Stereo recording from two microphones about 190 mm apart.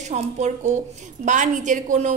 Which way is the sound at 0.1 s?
40° right (ahead or behind).